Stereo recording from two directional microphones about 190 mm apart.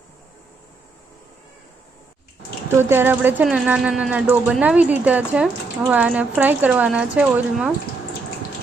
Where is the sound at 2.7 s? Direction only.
10° right (ahead or behind).